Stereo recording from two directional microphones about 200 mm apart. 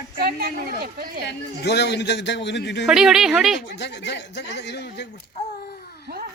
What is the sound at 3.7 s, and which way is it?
A man's voice, 60° left (ahead or behind).